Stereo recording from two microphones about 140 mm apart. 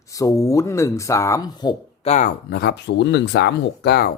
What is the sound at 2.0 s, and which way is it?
Speech, 55° left (ahead or behind).